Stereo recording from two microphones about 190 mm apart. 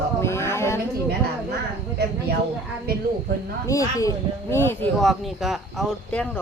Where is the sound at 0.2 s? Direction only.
15° left (ahead or behind).